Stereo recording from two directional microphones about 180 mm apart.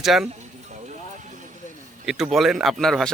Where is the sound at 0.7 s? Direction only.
40° right (ahead or behind).